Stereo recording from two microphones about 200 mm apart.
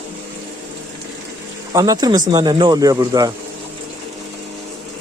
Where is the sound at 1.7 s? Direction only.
20° right (ahead or behind).